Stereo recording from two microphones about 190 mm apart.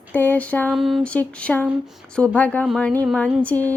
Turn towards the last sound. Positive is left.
turn(degrees=10)  # may be behind; listen again after turning